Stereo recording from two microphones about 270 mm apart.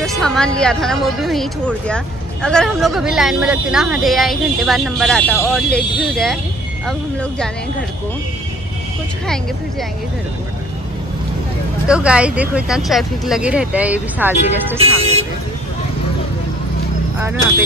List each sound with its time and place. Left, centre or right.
0.0 s speech: centre
11.9 s speech: centre
14.8 s speech: right
17.2 s speech: centre